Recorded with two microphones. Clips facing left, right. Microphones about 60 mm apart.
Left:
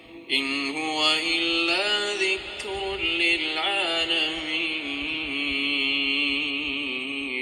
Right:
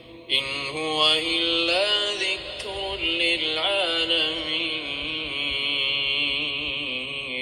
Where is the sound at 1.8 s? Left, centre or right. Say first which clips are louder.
Left 1 dB; centre.